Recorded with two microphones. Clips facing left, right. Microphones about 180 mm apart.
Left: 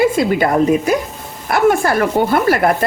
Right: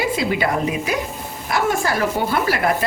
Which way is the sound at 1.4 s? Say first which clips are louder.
Left 7 dB; 55° left (ahead or behind).